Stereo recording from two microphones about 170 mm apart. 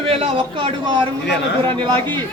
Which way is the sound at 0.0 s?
35° right (ahead or behind).